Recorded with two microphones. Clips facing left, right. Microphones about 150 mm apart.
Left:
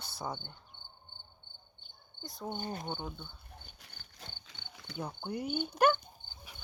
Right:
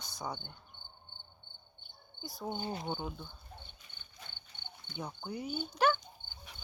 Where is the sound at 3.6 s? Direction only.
85° left.